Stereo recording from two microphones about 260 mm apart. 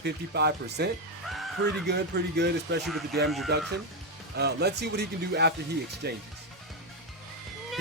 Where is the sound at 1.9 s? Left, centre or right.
Right.